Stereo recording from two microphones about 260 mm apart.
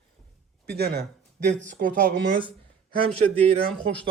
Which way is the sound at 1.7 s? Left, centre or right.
Right.